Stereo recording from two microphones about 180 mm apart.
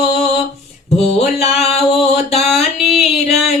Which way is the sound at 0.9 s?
35° left (ahead or behind).